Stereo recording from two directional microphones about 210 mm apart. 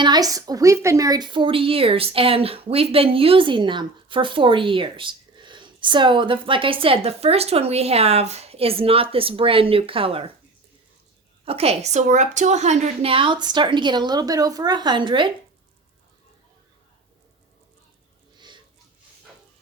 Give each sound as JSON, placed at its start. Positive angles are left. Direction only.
{"t": 0.0, "sound": "speech", "side_deg": -20}
{"t": 11.4, "sound": "speech", "side_deg": -30}
{"t": 18.3, "sound": "a sound", "side_deg": -20}